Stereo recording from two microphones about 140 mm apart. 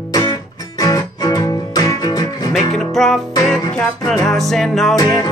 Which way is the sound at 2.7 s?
Centre (ahead or behind).